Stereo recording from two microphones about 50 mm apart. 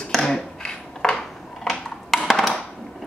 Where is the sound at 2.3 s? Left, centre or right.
Centre.